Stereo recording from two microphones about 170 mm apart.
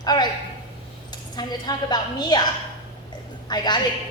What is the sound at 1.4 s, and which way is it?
A woman's voice, 25° left (ahead or behind).